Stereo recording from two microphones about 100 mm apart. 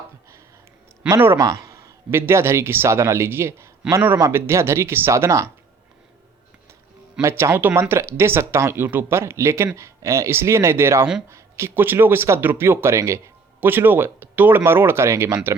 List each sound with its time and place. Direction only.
1.1 s a man's voice: 25° right (ahead or behind)
7.2 s a man's voice: 30° right (ahead or behind)